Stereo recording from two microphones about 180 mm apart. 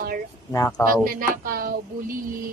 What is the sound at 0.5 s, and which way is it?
Speech, 20° left (ahead or behind).